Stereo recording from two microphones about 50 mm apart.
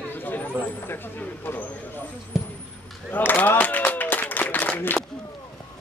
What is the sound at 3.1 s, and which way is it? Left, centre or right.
Clapping, left.